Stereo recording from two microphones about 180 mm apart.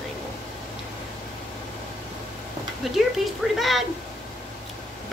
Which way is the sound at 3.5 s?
Centre (ahead or behind).